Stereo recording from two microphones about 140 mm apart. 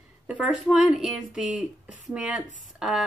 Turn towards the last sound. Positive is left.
turn(degrees=-5)  # may be behind; listen again after turning